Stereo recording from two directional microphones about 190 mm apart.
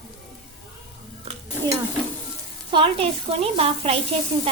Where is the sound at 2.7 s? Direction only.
30° right (ahead or behind).